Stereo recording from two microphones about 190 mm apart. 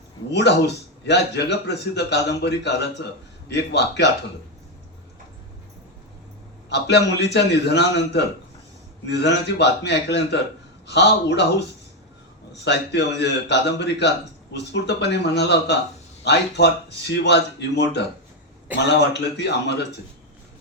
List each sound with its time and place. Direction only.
0.3 s a man's voice: 65° left (ahead or behind)
6.7 s a man's voice: 60° left (ahead or behind)
12.6 s a man's voice: 65° left (ahead or behind)